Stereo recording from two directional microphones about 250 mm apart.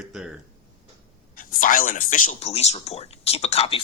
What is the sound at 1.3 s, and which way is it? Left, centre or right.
Speech, left.